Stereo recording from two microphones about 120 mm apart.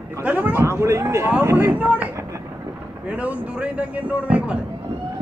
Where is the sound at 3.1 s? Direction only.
10° right (ahead or behind).